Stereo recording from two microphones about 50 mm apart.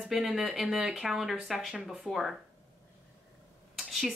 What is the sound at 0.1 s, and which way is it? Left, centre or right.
A woman's voice, centre.